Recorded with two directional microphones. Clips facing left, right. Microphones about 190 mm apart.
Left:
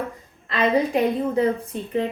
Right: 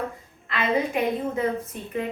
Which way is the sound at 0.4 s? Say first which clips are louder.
Left 4 dB; 35° left (ahead or behind).